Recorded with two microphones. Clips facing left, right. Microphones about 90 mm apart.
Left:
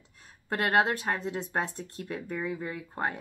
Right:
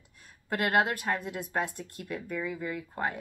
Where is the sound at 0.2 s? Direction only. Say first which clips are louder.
Even; 30° left (ahead or behind).